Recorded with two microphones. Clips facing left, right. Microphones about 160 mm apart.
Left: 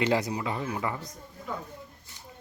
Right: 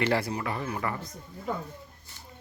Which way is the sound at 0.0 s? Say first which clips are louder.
Left 1 dB; 15° left (ahead or behind).